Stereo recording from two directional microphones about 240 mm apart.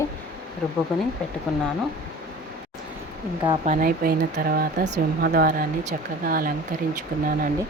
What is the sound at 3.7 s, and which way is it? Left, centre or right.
Speech, right.